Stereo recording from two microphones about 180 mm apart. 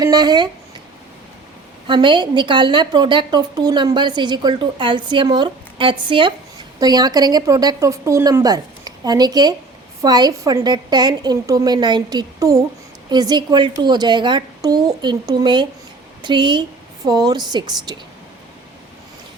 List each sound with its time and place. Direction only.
0.0 s a woman's voice: 20° right (ahead or behind)
1.9 s a woman's voice: 25° right (ahead or behind)